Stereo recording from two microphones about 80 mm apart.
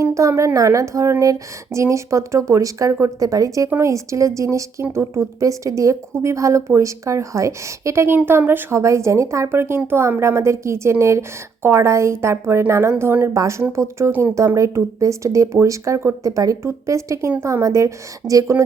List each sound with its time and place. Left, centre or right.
0.0 s a woman's voice: right
8.7 s a woman's voice: right